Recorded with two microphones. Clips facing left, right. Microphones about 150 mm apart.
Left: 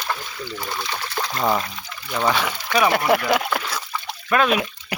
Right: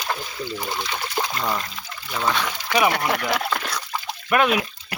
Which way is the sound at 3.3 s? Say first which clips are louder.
Left 3 dB; 10° left (ahead or behind).